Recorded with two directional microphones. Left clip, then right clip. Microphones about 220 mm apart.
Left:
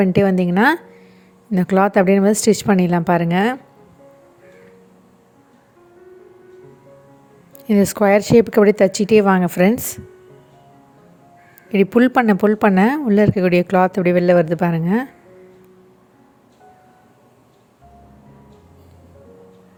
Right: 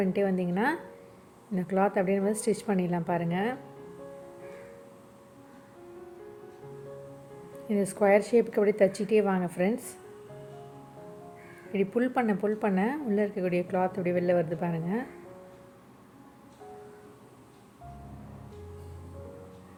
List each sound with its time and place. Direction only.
0.0 s speech: 45° left (ahead or behind)
7.7 s speech: 45° left (ahead or behind)
11.7 s speech: 45° left (ahead or behind)